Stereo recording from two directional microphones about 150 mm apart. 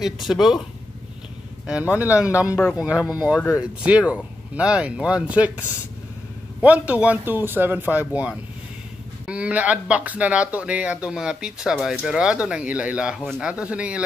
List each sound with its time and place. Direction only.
0.0 s speech: centre (ahead or behind)
1.7 s speech: 10° right (ahead or behind)